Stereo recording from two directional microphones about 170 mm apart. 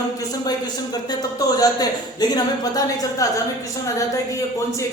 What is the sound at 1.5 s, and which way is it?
Speech, 25° left (ahead or behind).